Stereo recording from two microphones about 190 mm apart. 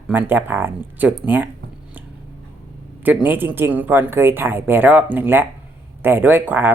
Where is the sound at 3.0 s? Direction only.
10° right (ahead or behind).